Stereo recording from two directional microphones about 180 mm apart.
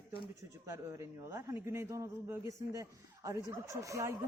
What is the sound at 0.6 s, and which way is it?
A woman's voice, 15° right (ahead or behind).